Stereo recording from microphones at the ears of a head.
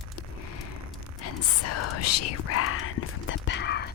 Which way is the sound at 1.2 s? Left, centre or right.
Left.